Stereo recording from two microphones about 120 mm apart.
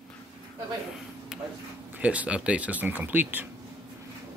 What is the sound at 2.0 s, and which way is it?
Speech, 10° right (ahead or behind).